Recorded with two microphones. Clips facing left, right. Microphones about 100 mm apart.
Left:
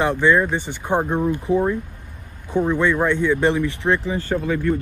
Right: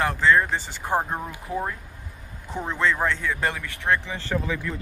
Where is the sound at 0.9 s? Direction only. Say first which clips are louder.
Left 6 dB; 10° right (ahead or behind).